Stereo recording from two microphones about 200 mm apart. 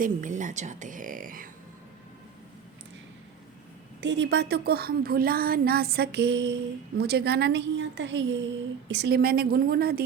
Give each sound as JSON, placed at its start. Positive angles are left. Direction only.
{"t": 0.0, "sound": "a woman's voice", "side_deg": -40}
{"t": 4.0, "sound": "a woman's voice", "side_deg": -60}